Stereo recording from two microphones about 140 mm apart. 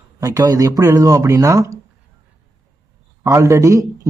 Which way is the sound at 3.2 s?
20° right (ahead or behind).